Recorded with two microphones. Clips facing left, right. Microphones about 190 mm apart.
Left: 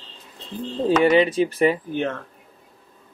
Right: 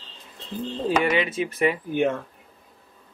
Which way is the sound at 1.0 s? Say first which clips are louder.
Left 7 dB; 35° left (ahead or behind).